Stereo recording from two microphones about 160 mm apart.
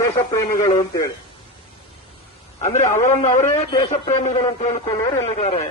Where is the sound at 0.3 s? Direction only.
20° left (ahead or behind).